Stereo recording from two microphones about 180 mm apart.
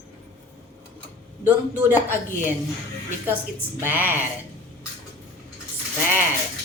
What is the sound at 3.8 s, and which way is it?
Speech, 10° right (ahead or behind).